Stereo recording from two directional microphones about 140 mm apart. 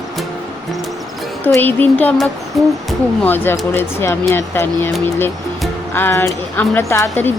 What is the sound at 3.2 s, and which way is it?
Speech, 15° left (ahead or behind).